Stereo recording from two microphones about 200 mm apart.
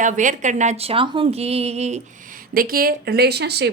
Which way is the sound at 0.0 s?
40° right (ahead or behind).